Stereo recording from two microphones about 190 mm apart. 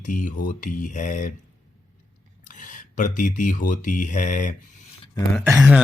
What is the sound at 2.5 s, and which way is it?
Speech, 40° left (ahead or behind).